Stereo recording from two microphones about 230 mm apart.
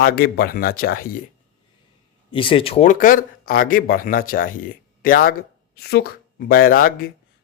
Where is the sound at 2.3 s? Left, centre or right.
Left.